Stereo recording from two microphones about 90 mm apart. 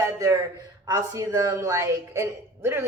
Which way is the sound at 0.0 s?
35° right (ahead or behind).